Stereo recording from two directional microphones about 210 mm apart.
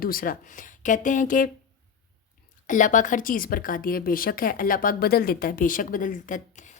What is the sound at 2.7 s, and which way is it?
A woman's voice, 40° left (ahead or behind).